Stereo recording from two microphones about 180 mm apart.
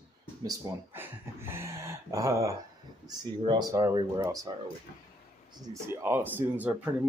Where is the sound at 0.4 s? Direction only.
20° right (ahead or behind).